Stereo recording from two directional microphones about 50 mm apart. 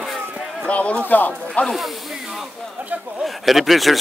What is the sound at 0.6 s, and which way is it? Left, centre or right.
Speech, left.